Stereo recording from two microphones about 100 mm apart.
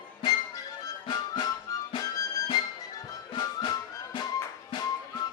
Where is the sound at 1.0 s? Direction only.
45° left (ahead or behind).